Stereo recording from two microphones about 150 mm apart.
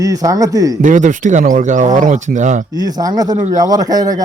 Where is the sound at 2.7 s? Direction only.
25° right (ahead or behind).